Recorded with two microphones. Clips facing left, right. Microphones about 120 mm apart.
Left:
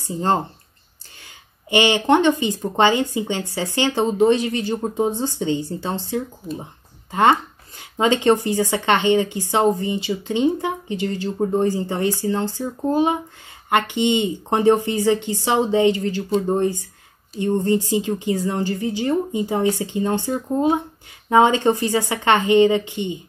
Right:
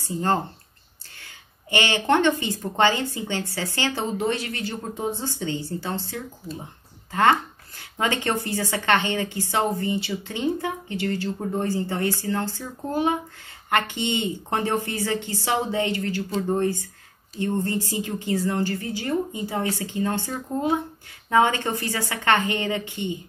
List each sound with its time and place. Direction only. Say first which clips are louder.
0.0 s speech: left 3 dB; 20° left (ahead or behind)